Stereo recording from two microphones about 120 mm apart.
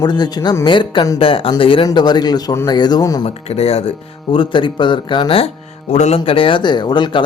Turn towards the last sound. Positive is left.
turn(degrees=40)  # may be behind; listen again after turning